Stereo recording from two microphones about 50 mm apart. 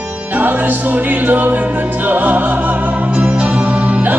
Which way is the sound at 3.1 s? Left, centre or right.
Right.